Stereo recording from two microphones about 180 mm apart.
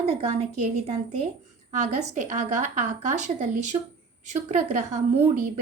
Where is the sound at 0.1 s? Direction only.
35° right (ahead or behind).